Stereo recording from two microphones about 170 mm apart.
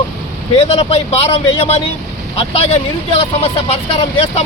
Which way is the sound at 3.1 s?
35° left (ahead or behind).